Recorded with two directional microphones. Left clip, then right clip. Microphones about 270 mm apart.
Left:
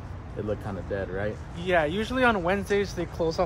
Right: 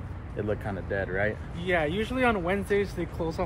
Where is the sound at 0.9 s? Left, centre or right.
Centre.